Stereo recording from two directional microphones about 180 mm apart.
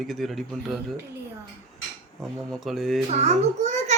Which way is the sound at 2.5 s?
Centre (ahead or behind).